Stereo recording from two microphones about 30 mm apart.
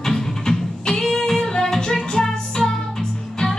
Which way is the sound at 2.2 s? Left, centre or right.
Left.